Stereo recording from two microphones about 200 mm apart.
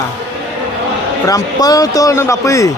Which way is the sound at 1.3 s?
20° left (ahead or behind).